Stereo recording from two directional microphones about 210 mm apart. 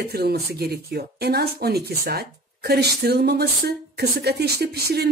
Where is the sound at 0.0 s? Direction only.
50° right (ahead or behind).